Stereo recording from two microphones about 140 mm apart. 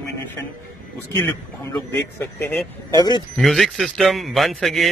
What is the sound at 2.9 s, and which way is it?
Speech, 30° left (ahead or behind).